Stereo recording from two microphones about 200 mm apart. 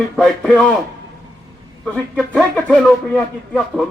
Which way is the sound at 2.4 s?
5° left (ahead or behind).